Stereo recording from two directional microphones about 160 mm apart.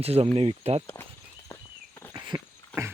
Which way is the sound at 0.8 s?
15° left (ahead or behind).